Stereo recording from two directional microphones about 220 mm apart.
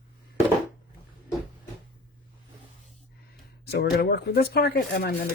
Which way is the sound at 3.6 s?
45° left (ahead or behind).